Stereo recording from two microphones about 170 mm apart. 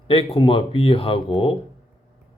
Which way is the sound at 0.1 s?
35° left (ahead or behind).